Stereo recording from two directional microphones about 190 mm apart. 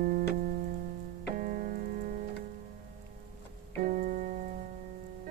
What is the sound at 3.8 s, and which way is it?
Keyboard, 45° right (ahead or behind).